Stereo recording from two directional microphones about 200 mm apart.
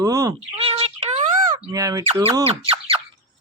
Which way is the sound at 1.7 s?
15° right (ahead or behind).